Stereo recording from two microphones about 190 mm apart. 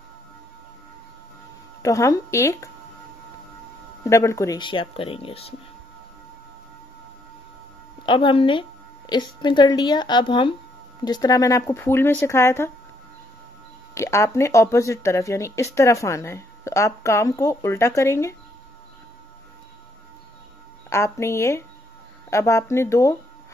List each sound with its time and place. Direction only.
1.8 s speech: 15° left (ahead or behind)
4.0 s speech: 15° left (ahead or behind); by 5.5 s 30° left (ahead or behind)
8.0 s a woman's voice: 25° left (ahead or behind)
13.9 s speech: 15° left (ahead or behind)
20.9 s speech: 15° left (ahead or behind)